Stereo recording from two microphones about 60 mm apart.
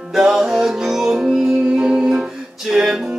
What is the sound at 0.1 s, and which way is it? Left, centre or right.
Music, centre.